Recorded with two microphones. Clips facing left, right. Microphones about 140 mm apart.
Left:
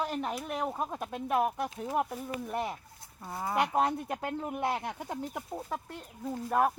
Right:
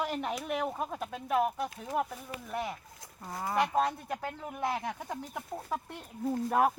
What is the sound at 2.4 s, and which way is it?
Speech, 20° left (ahead or behind).